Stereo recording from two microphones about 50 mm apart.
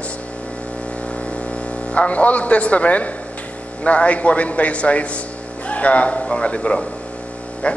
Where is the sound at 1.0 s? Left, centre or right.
Left.